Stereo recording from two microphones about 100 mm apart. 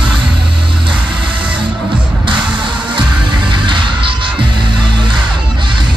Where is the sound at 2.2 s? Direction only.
50° right (ahead or behind).